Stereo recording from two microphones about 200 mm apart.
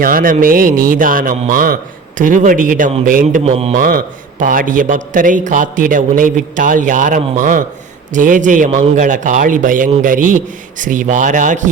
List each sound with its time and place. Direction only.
0.0 s speech: 45° right (ahead or behind)
3.8 s a man's voice: 45° right (ahead or behind)